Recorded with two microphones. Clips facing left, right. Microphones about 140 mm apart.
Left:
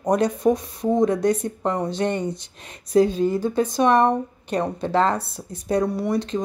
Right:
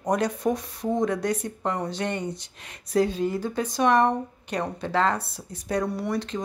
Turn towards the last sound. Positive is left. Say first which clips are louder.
# left 5 dB
turn(degrees=20)  # may be behind; listen again after turning